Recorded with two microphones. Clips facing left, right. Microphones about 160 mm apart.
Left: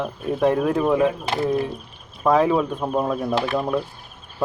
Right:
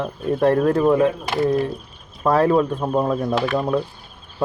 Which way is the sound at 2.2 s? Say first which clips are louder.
Right 1 dB; 5° right (ahead or behind).